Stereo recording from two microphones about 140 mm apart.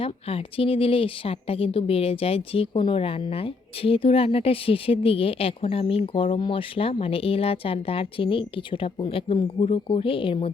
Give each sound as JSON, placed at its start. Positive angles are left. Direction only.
{"t": 0.0, "sound": "a woman's voice", "side_deg": 40}